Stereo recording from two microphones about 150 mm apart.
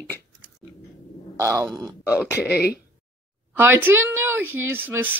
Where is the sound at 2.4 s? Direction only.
90° left.